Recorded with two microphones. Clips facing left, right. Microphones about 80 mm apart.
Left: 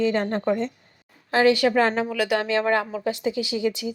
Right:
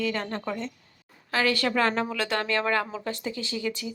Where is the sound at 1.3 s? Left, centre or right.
Left.